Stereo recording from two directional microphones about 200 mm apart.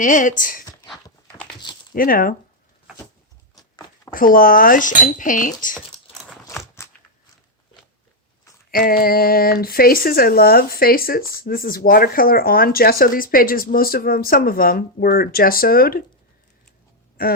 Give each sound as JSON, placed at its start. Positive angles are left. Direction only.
{"t": 0.0, "sound": "speech", "side_deg": 40}
{"t": 1.6, "sound": "a sound", "side_deg": 20}
{"t": 2.0, "sound": "speech", "side_deg": 45}
{"t": 3.5, "sound": "a sound", "side_deg": 20}
{"t": 4.1, "sound": "speech", "side_deg": 45}
{"t": 6.5, "sound": "crunch", "side_deg": 15}
{"t": 8.7, "sound": "speech", "side_deg": 45}